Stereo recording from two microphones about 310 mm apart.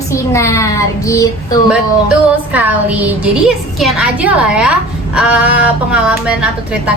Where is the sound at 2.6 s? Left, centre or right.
Centre.